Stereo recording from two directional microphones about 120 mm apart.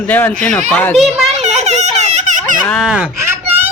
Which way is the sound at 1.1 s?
70° right (ahead or behind).